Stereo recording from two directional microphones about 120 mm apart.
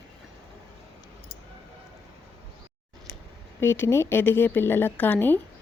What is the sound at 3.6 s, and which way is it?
A woman's voice, 20° left (ahead or behind).